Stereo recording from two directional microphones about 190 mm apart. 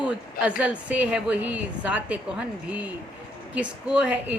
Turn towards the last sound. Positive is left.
turn(degrees=-5)  # may be behind; listen again after turning